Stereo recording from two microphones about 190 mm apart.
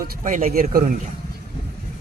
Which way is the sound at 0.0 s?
45° right (ahead or behind).